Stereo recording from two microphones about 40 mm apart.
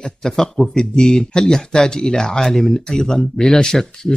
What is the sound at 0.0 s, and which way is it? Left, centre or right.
Speech, centre.